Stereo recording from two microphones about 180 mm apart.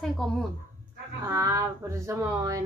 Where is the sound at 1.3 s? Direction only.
15° right (ahead or behind).